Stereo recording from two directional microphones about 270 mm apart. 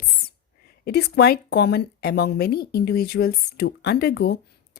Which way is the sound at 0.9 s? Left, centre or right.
Left.